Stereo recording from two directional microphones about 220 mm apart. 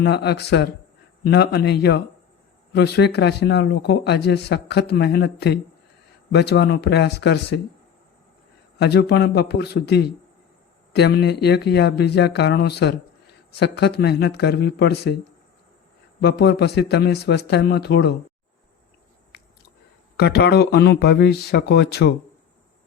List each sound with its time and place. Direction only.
0.0 s speech: 50° left (ahead or behind)
8.8 s speech: 50° left (ahead or behind)
16.2 s speech: 50° left (ahead or behind)
20.1 s speech: 50° left (ahead or behind)